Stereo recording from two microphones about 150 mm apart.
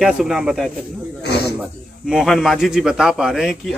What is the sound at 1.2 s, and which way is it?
Snake, 90° left.